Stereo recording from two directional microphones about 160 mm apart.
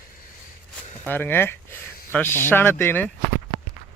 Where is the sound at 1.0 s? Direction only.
10° left (ahead or behind).